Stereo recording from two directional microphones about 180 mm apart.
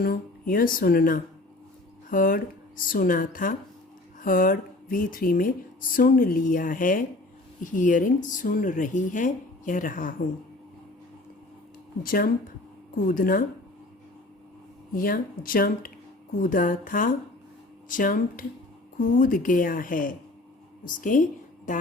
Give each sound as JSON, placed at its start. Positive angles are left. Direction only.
{"t": 0.0, "sound": "speech", "side_deg": 55}
{"t": 12.0, "sound": "speech", "side_deg": 55}
{"t": 14.9, "sound": "speech", "side_deg": 50}